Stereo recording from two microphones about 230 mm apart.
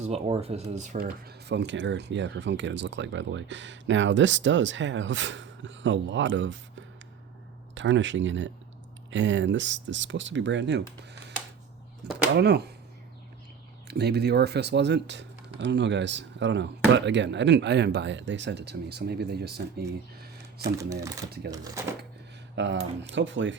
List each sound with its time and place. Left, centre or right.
0.0 s speech: right
13.8 s speech: right
20.6 s speech: centre
22.5 s speech: right